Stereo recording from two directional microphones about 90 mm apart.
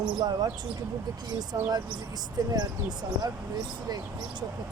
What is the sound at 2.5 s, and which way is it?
Speech, 50° right (ahead or behind).